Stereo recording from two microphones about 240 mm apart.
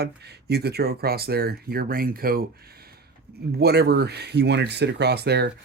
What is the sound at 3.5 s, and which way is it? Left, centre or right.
Speech, right.